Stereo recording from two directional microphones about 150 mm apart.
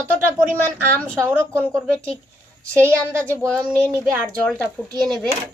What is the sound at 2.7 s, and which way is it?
Speech, 15° right (ahead or behind).